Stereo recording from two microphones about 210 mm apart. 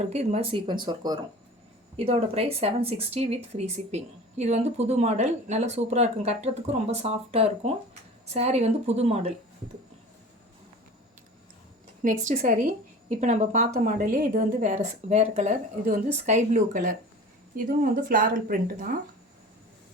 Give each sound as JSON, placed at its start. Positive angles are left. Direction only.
{"t": 0.1, "sound": "speech", "side_deg": -30}
{"t": 12.0, "sound": "speech", "side_deg": -35}